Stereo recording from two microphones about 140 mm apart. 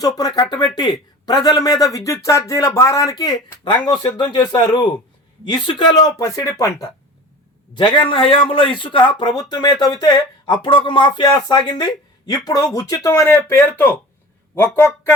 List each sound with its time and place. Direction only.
0.2 s speech: 30° left (ahead or behind)
7.7 s speech: 35° left (ahead or behind); by 14.8 s 15° left (ahead or behind)